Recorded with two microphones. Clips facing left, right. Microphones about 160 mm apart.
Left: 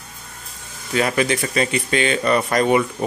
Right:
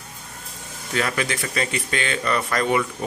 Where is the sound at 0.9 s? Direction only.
20° left (ahead or behind).